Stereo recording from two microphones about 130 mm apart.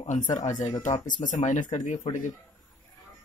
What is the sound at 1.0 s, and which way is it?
Speech, 80° left.